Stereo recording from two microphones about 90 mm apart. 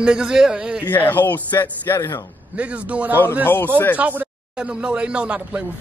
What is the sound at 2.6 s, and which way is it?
Speech, 15° right (ahead or behind).